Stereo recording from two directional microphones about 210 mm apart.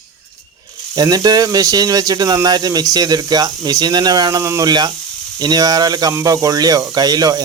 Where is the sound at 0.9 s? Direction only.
20° right (ahead or behind).